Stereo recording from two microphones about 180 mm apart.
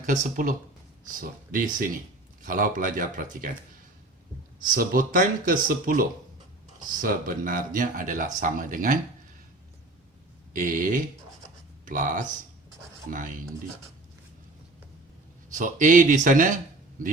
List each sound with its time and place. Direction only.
0.0 s speech: 45° right (ahead or behind)
4.6 s speech: 50° right (ahead or behind)
10.5 s speech: 45° right (ahead or behind)
15.5 s speech: 45° right (ahead or behind)